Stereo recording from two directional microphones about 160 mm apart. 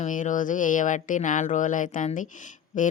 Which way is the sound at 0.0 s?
55° left (ahead or behind).